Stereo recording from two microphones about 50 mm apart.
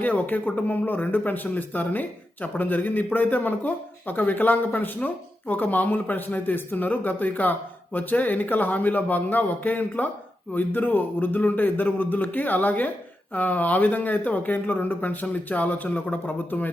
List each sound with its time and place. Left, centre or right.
0.0 s speech: left